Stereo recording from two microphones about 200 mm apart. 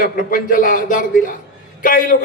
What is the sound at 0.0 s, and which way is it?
A man's voice, 45° left (ahead or behind).